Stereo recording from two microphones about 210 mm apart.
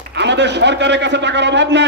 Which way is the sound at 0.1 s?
55° right (ahead or behind).